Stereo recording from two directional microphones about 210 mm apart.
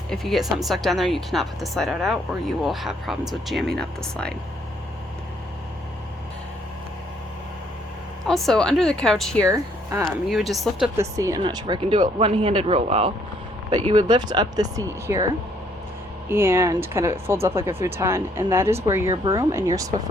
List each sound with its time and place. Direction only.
0.1 s speech: centre (ahead or behind)
8.3 s speech: centre (ahead or behind)
9.5 s speech: 15° right (ahead or behind)
10.2 s speech: centre (ahead or behind)
10.9 s speech: 15° right (ahead or behind)
16.3 s speech: 10° right (ahead or behind)